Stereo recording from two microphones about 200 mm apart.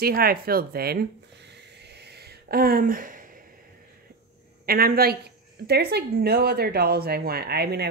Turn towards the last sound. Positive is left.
turn(degrees=-55)  # may be behind; listen again after turning